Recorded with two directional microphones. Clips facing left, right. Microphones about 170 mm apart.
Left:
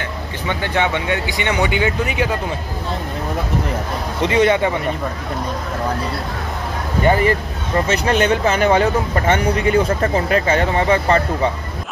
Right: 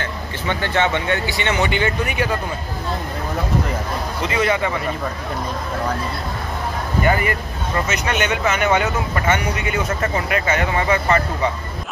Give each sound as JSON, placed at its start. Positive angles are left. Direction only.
{"t": 0.0, "sound": "speech", "side_deg": 15}
{"t": 4.3, "sound": "speech", "side_deg": 25}
{"t": 7.0, "sound": "speech", "side_deg": 30}